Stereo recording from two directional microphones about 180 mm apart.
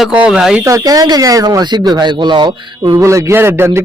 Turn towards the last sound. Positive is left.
turn(degrees=-15)  # may be behind; listen again after turning